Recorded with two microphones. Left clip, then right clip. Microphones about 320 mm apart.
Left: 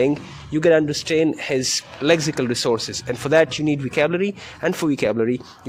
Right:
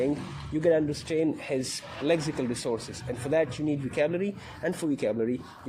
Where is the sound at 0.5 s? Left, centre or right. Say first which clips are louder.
Left 8 dB; left.